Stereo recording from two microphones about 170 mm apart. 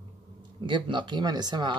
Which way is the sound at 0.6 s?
30° right (ahead or behind).